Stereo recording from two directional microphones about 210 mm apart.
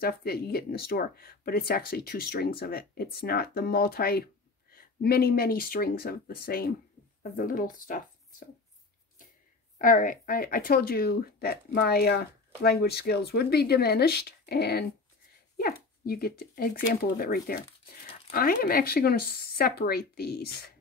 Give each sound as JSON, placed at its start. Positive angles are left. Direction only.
{"t": 0.0, "sound": "speech", "side_deg": 45}
{"t": 9.8, "sound": "speech", "side_deg": 40}